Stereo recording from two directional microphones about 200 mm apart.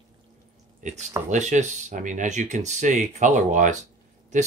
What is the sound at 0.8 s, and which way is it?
Speech, 35° right (ahead or behind).